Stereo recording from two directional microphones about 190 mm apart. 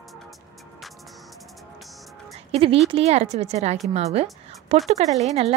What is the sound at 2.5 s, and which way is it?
A woman's voice, 30° right (ahead or behind).